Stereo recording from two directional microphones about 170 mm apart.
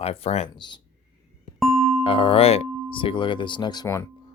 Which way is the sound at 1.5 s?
Centre (ahead or behind).